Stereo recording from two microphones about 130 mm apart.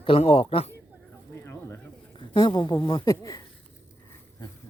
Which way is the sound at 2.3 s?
35° left (ahead or behind).